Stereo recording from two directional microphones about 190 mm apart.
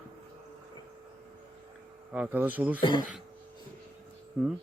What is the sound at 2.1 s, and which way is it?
Speech, 5° right (ahead or behind).